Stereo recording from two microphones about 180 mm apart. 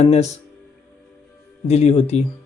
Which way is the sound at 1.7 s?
35° left (ahead or behind).